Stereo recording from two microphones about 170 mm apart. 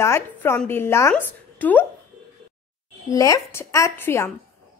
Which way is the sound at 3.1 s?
20° left (ahead or behind).